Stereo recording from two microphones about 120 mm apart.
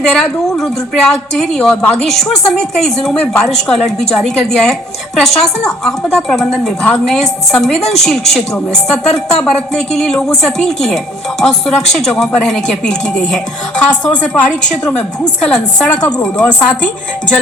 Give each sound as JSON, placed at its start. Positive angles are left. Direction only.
{"t": 0.0, "sound": "a woman's voice", "side_deg": 5}
{"t": 7.8, "sound": "a woman's voice", "side_deg": 65}
{"t": 8.0, "sound": "a woman's voice", "side_deg": 0}